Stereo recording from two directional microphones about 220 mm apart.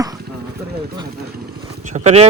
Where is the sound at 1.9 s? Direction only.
30° right (ahead or behind).